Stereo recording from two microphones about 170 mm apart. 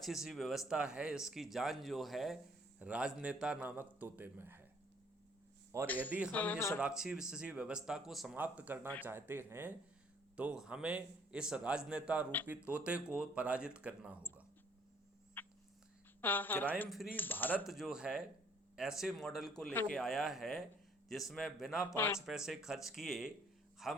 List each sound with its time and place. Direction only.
0.0 s speech: centre (ahead or behind)
5.7 s speech: 15° right (ahead or behind)
6.3 s speech: 10° left (ahead or behind)
6.7 s speech: 5° right (ahead or behind)
15.4 s a sound: 10° left (ahead or behind)
16.2 s speech: 10° left (ahead or behind)
17.7 s speech: centre (ahead or behind)
21.8 s speech: 15° left (ahead or behind)
22.3 s speech: centre (ahead or behind)